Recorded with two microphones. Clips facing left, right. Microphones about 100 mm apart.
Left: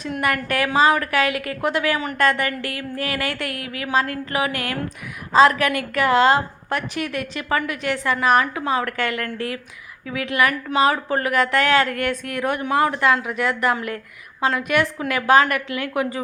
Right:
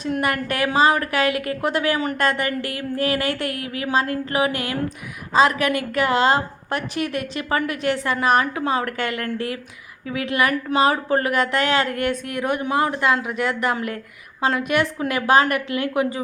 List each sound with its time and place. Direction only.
0.0 s a woman's voice: 30° right (ahead or behind)